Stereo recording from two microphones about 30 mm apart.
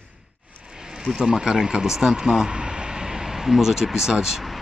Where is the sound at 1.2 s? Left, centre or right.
Right.